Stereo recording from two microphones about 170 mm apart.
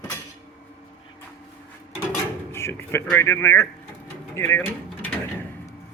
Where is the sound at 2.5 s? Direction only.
15° left (ahead or behind).